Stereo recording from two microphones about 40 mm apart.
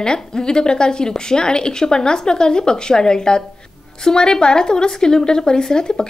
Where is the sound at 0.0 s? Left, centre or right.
Centre.